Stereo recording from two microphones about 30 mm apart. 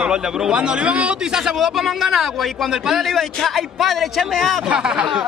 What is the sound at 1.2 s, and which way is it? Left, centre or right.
Speech, right.